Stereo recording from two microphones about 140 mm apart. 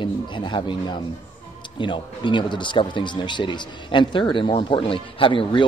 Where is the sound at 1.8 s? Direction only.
35° left (ahead or behind).